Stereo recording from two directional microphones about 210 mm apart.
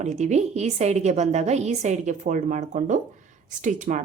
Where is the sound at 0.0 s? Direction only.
35° right (ahead or behind).